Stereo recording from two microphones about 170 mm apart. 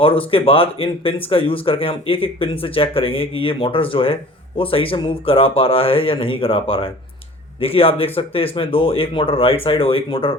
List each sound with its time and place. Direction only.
0.0 s speech: 30° left (ahead or behind)